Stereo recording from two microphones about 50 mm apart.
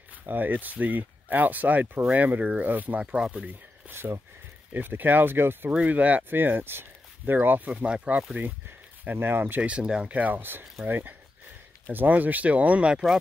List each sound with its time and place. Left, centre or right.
0.3 s speech: right
3.2 s speech: right
4.0 s speech: right
4.7 s speech: right
5.9 s speech: right
6.3 s speech: right
7.7 s speech: right
8.4 s speech: right
9.6 s speech: right
10.1 s speech: right